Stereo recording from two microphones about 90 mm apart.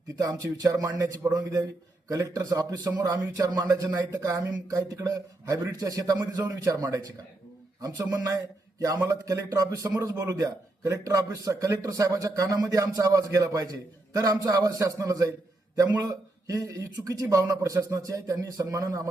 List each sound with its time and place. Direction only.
0.2 s a man's voice: 40° right (ahead or behind)
8.1 s a sound: 40° right (ahead or behind)
9.0 s a man's voice: 35° right (ahead or behind)